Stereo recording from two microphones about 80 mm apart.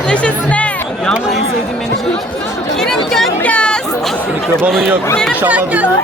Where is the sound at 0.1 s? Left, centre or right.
Centre.